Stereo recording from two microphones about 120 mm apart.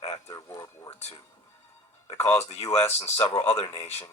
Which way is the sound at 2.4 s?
60° left (ahead or behind).